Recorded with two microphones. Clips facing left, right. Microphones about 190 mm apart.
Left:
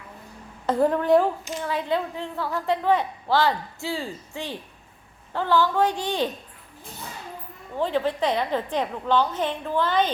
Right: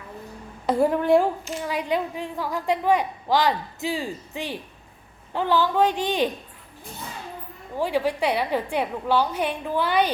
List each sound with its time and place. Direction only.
0.7 s a woman's voice: 10° right (ahead or behind)
7.8 s a woman's voice: 10° right (ahead or behind)